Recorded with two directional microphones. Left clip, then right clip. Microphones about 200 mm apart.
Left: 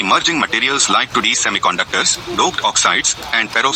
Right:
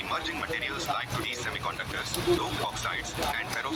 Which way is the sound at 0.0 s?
45° left (ahead or behind).